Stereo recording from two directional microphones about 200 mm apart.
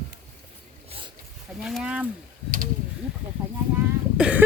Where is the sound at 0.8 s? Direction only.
25° right (ahead or behind).